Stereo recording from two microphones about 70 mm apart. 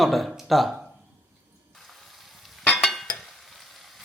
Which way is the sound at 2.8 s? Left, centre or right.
Centre.